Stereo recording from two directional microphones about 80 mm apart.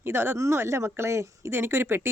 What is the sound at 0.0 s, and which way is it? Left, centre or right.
A woman's voice, right.